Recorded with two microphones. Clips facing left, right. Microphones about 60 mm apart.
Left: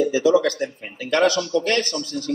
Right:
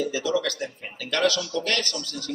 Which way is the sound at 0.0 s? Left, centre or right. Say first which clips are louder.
Left 8 dB; left.